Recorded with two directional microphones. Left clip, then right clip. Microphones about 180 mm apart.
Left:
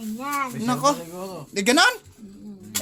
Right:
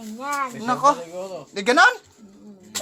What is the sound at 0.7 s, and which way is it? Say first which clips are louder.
A woman's voice: right 4 dB; 15° left (ahead or behind).